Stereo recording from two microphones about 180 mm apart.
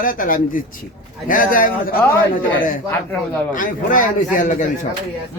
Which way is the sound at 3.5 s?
45° left (ahead or behind).